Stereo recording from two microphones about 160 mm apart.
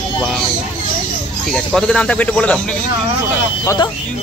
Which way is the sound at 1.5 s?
Centre (ahead or behind).